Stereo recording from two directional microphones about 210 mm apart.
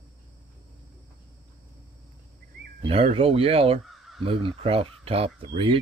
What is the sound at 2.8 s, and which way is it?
Speech, 30° right (ahead or behind).